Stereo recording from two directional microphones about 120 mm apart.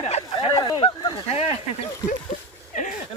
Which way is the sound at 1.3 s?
55° left (ahead or behind).